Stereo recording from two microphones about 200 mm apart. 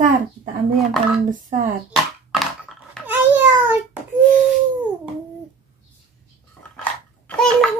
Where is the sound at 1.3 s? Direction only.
40° right (ahead or behind).